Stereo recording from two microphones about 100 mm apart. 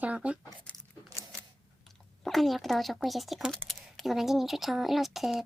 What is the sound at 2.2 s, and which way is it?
Speech, centre (ahead or behind).